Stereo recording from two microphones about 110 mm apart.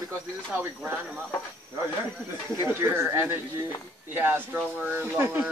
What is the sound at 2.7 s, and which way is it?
Speech, 20° right (ahead or behind).